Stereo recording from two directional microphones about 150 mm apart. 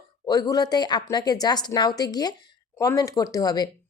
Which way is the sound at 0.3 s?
25° left (ahead or behind).